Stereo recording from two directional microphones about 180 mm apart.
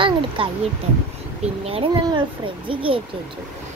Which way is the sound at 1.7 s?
30° right (ahead or behind).